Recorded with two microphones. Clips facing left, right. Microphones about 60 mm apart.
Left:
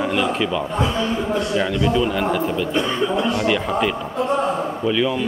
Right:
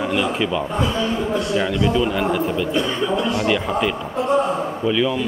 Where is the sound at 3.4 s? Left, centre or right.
Centre.